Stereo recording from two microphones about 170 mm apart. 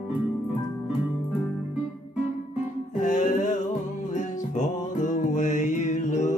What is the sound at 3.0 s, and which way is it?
Music, 45° left (ahead or behind).